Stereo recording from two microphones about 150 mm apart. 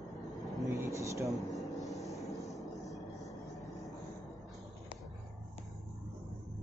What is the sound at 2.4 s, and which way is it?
Vehicle, centre (ahead or behind).